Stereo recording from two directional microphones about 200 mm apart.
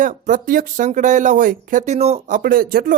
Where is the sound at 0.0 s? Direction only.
40° right (ahead or behind).